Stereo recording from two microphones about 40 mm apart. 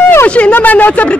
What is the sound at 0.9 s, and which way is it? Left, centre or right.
Speech, left.